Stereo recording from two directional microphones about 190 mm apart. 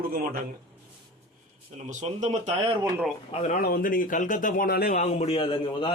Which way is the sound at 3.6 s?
50° left (ahead or behind).